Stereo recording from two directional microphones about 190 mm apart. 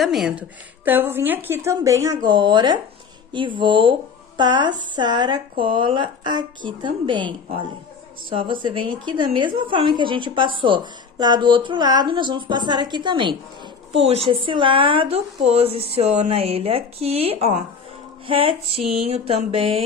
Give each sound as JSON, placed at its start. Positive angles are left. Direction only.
{"t": 0.0, "sound": "a woman's voice", "side_deg": 0}
{"t": 8.3, "sound": "a woman's voice", "side_deg": -25}